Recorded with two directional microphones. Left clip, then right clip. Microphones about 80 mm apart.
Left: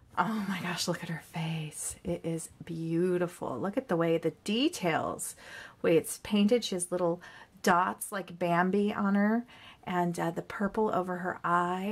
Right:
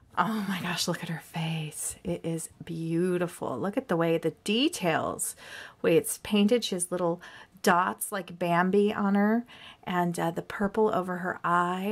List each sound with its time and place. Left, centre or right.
0.1 s a woman's voice: right